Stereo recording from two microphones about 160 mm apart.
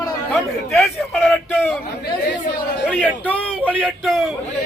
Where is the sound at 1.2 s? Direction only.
10° left (ahead or behind).